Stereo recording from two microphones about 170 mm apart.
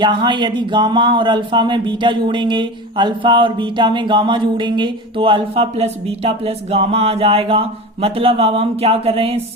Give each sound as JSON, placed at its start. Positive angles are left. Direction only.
{"t": 0.0, "sound": "speech", "side_deg": -25}